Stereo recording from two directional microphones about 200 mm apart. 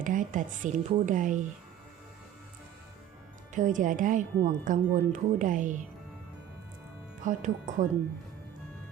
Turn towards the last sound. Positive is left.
turn(degrees=-40)  # may be behind; listen again after turning